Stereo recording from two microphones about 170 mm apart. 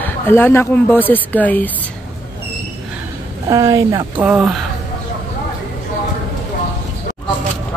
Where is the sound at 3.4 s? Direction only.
20° right (ahead or behind).